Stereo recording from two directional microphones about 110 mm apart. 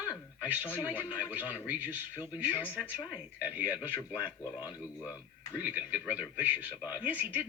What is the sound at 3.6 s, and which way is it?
Speech, 15° right (ahead or behind).